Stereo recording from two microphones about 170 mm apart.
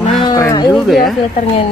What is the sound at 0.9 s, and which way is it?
Speech, centre (ahead or behind).